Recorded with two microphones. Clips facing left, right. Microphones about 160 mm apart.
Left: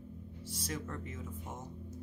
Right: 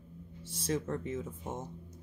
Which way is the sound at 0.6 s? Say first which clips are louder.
Right 9 dB; 30° right (ahead or behind).